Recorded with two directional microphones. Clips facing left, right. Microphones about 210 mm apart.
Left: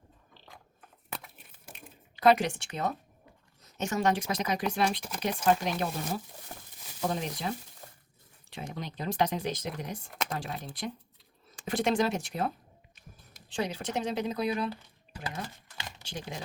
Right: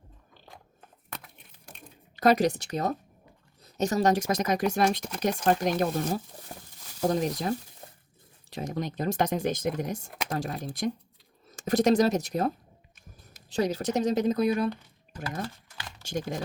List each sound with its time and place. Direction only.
1.1 s a sound: centre (ahead or behind)
2.1 s speech: 40° right (ahead or behind)
13.5 s speech: 40° right (ahead or behind)
16.0 s speech: 45° right (ahead or behind)